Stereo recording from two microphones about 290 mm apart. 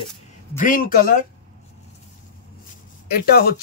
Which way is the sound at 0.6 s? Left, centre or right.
Left.